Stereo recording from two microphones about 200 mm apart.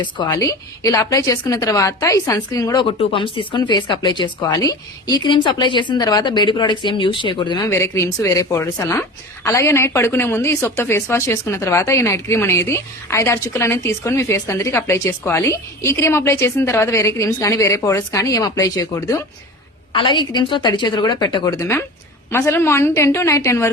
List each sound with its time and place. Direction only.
0.0 s a woman's voice: 20° left (ahead or behind)